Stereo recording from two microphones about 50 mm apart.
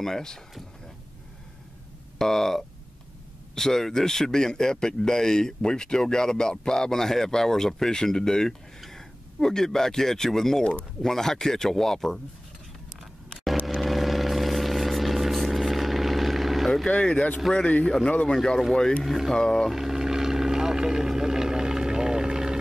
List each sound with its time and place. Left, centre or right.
0.0 s speech: centre
2.1 s speech: centre
13.3 s vehicle: centre
16.9 s speech: centre
18.2 s speech: centre
19.0 s speech: centre
19.3 s speech: centre
19.7 s vehicle: centre